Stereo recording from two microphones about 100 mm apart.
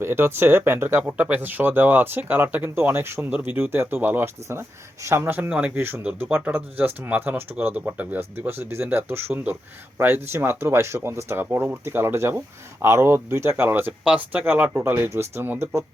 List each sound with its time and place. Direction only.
0.0 s speech: 25° right (ahead or behind)